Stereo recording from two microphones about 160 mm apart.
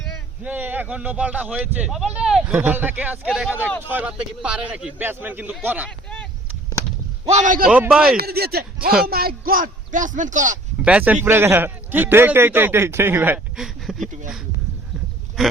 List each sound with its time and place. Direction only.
0.4 s a man's voice: 10° right (ahead or behind)
7.3 s speech: 50° right (ahead or behind)
7.7 s speech: 5° right (ahead or behind)
8.1 s speech: 75° right (ahead or behind); by 10.6 s 50° right (ahead or behind)
10.8 s a man's voice: 10° right (ahead or behind)
15.4 s speech: centre (ahead or behind)